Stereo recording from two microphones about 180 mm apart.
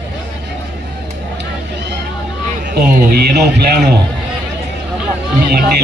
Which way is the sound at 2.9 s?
60° right (ahead or behind).